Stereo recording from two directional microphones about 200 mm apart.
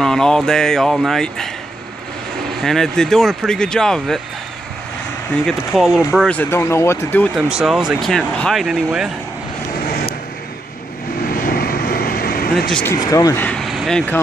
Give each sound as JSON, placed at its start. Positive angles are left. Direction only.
{"t": 0.0, "sound": "speech", "side_deg": 5}
{"t": 2.6, "sound": "speech", "side_deg": 0}
{"t": 5.5, "sound": "speech", "side_deg": 0}
{"t": 7.3, "sound": "speech", "side_deg": -5}
{"t": 11.4, "sound": "vehicle", "side_deg": 50}
{"t": 12.5, "sound": "speech", "side_deg": 5}
{"t": 12.9, "sound": "speech", "side_deg": 15}